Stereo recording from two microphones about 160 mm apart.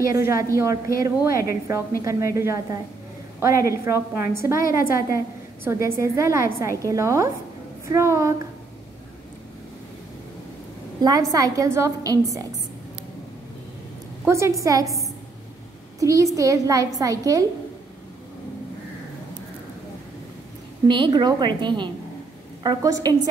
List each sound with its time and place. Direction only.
0.1 s a woman's voice: 20° right (ahead or behind)
11.0 s a woman's voice: 25° right (ahead or behind)
14.2 s a woman's voice: 15° right (ahead or behind)
16.0 s a woman's voice: 20° right (ahead or behind)
20.8 s a woman's voice: 30° right (ahead or behind)